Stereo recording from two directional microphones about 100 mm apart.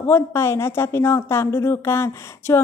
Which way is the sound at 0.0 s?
25° left (ahead or behind).